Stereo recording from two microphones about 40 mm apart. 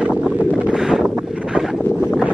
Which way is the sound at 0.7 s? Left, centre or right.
Centre.